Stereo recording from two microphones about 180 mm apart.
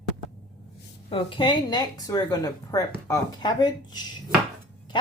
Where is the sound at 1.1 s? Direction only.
25° left (ahead or behind).